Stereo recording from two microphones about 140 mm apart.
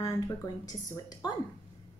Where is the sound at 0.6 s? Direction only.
25° left (ahead or behind).